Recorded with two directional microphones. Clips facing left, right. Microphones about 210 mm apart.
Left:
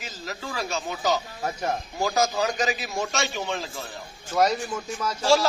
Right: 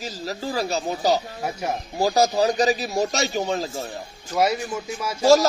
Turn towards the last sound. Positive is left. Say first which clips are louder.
# right 1 dB
turn(degrees=-10)  # may be behind; listen again after turning